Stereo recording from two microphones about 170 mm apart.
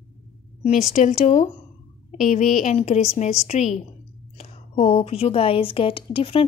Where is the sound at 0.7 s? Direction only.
40° left (ahead or behind).